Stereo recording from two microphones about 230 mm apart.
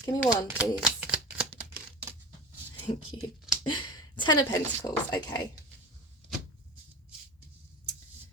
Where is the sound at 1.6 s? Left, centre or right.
Centre.